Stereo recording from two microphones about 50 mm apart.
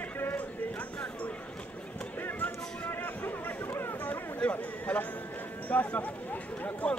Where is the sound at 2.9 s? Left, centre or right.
Left.